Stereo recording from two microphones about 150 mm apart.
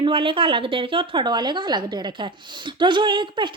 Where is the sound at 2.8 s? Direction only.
30° right (ahead or behind).